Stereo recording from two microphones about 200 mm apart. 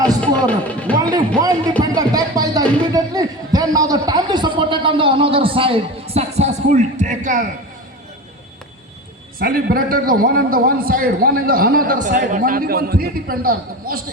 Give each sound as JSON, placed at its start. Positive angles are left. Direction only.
{"t": 0.2, "sound": "speech", "side_deg": 5}
{"t": 1.8, "sound": "music", "side_deg": -20}
{"t": 9.4, "sound": "a man's voice", "side_deg": -50}